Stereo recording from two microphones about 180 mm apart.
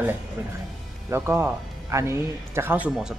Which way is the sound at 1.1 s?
15° right (ahead or behind).